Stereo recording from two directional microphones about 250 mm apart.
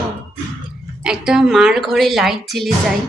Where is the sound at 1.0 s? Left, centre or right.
Centre.